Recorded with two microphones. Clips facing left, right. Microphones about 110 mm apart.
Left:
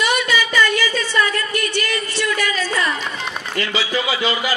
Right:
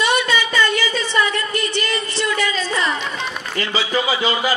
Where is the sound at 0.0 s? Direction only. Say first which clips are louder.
Right 1 dB; 25° right (ahead or behind).